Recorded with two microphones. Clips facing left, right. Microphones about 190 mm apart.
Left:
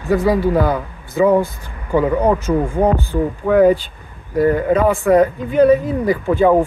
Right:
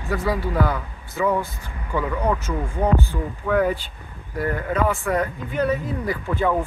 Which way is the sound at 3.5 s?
25° left (ahead or behind).